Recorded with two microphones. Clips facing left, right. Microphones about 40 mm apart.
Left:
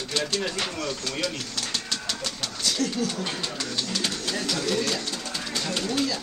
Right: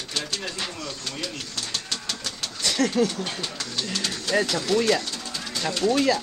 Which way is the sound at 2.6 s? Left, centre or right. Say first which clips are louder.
Right 5 dB; right.